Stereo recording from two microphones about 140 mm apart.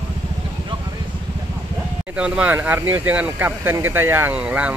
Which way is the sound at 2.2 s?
10° right (ahead or behind).